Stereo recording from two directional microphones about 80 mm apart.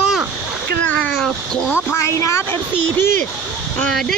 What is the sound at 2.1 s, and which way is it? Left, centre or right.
Speech, left.